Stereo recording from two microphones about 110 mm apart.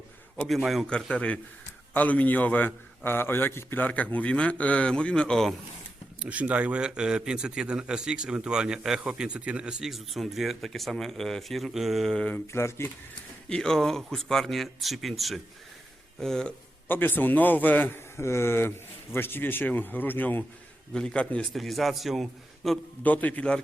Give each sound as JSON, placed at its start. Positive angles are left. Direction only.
{"t": 0.4, "sound": "a man's voice", "side_deg": 0}
{"t": 6.1, "sound": "a man's voice", "side_deg": -10}
{"t": 12.5, "sound": "a man's voice", "side_deg": 25}
{"t": 13.5, "sound": "speech", "side_deg": 5}
{"t": 16.9, "sound": "a man's voice", "side_deg": 20}
{"t": 23.0, "sound": "a man's voice", "side_deg": 15}